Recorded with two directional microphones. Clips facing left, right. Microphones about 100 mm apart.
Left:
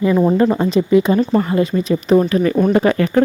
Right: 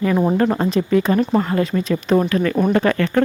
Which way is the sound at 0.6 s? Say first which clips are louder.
Left 4 dB; centre (ahead or behind).